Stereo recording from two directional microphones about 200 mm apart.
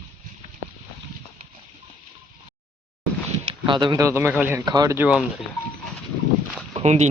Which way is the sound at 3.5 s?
25° right (ahead or behind).